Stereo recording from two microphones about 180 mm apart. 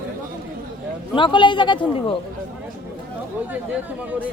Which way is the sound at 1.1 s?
25° left (ahead or behind).